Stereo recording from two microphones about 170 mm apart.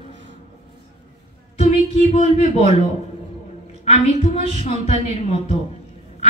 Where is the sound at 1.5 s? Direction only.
40° left (ahead or behind).